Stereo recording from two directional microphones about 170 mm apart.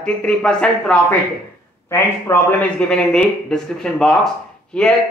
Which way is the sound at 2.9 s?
5° left (ahead or behind).